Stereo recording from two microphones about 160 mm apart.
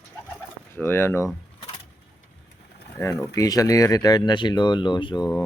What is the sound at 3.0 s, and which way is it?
Speech, 20° left (ahead or behind).